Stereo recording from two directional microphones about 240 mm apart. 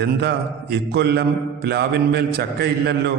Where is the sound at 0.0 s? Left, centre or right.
Right.